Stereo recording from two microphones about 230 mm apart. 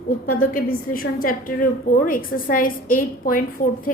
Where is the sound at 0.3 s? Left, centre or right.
Left.